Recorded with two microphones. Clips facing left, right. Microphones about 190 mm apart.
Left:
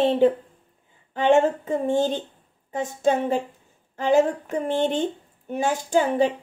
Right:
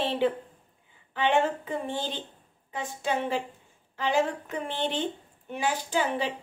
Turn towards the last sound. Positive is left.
turn(degrees=45)  # may be behind; listen again after turning